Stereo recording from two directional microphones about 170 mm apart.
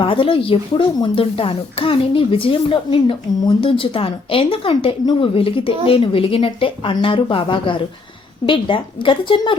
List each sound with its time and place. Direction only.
0.0 s a woman's voice: 30° left (ahead or behind)